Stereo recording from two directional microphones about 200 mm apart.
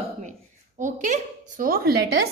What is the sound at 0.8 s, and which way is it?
A woman's voice, 40° right (ahead or behind).